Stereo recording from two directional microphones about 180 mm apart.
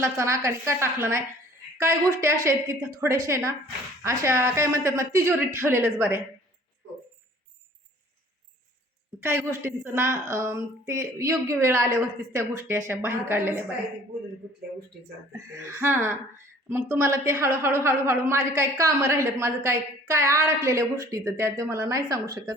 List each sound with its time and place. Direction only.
0.0 s a woman's voice: 15° right (ahead or behind)
9.2 s a woman's voice: 15° right (ahead or behind)
15.3 s a woman's voice: 15° right (ahead or behind)